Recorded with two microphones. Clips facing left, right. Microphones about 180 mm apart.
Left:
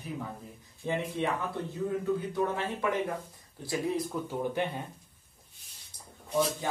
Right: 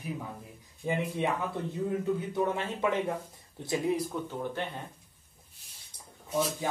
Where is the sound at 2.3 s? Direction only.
20° right (ahead or behind).